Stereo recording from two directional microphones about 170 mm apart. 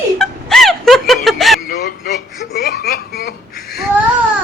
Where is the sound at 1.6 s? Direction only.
60° left (ahead or behind).